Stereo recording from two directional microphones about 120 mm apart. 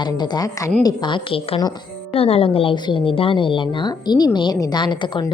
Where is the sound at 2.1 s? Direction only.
55° left (ahead or behind); by 5.3 s 40° left (ahead or behind).